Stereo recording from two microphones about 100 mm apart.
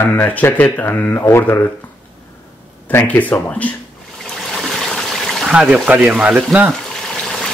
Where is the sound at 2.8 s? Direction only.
15° left (ahead or behind).